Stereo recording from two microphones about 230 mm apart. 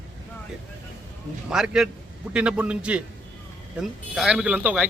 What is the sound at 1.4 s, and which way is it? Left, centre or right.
A man's voice, centre.